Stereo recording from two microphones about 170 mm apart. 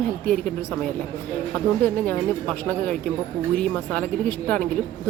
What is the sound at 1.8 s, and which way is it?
Speech, 10° left (ahead or behind).